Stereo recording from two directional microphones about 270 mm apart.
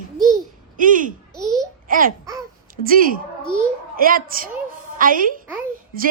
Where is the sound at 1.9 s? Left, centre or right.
Right.